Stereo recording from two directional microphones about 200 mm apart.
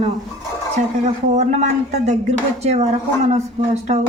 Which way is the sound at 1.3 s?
35° right (ahead or behind).